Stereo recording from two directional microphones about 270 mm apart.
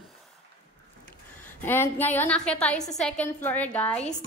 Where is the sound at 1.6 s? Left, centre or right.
Centre.